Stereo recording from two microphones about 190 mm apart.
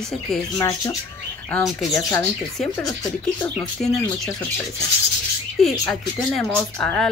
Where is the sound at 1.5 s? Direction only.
Centre (ahead or behind).